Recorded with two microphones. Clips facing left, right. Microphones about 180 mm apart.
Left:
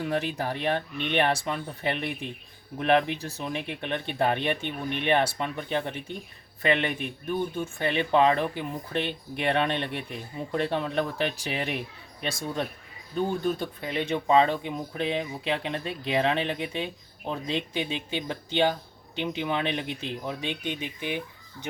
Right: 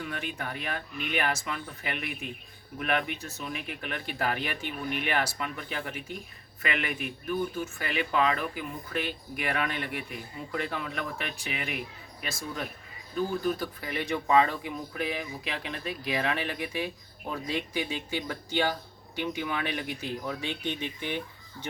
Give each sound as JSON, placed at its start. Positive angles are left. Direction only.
{"t": 0.0, "sound": "speech", "side_deg": 35}